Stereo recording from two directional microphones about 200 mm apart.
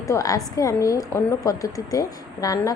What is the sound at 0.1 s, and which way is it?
A woman's voice, 15° left (ahead or behind).